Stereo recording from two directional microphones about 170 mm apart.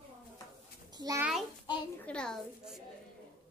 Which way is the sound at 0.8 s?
20° right (ahead or behind).